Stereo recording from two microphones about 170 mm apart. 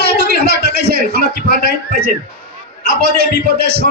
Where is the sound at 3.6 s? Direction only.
65° right (ahead or behind).